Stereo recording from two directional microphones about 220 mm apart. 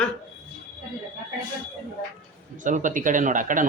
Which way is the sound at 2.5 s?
35° right (ahead or behind).